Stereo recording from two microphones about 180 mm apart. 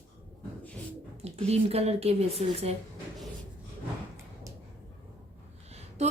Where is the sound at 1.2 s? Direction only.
35° right (ahead or behind).